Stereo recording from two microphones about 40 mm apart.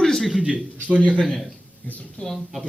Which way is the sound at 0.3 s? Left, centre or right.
Centre.